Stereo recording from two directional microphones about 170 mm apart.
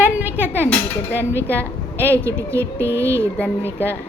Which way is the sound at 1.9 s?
15° right (ahead or behind).